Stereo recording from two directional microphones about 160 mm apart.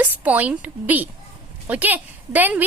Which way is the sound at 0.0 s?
10° right (ahead or behind).